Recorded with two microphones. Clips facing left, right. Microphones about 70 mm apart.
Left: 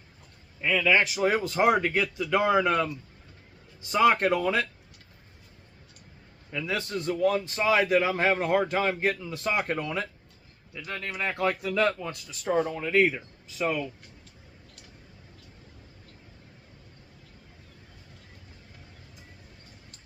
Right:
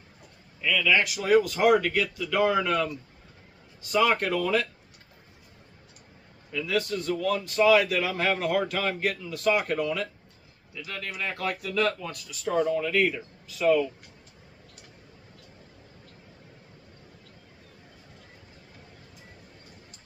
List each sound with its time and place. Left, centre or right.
0.6 s a man's voice: left
6.5 s a man's voice: left